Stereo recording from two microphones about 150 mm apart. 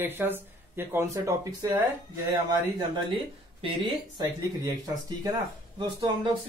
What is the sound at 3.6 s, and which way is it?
Speech, 30° right (ahead or behind).